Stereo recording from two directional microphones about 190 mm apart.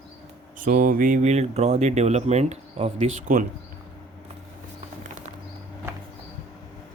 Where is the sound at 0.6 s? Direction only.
45° right (ahead or behind).